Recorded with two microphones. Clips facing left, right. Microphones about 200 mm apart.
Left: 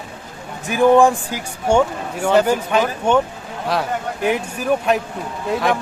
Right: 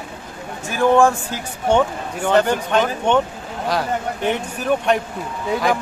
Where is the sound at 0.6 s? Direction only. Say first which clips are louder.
Left 2 dB; 15° left (ahead or behind).